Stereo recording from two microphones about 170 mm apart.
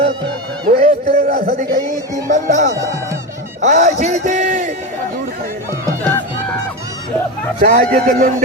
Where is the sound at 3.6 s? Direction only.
45° right (ahead or behind).